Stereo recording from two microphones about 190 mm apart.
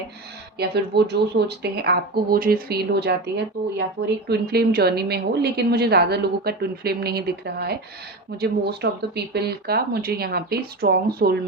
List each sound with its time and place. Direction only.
0.6 s speech: 60° right (ahead or behind)